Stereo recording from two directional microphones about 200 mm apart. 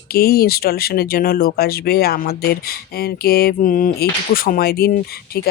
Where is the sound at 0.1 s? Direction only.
50° left (ahead or behind).